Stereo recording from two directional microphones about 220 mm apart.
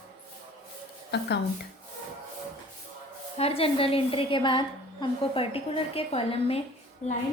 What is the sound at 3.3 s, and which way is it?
A woman's voice, 25° left (ahead or behind).